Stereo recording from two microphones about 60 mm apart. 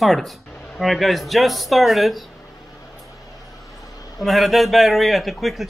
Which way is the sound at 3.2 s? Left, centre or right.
Left.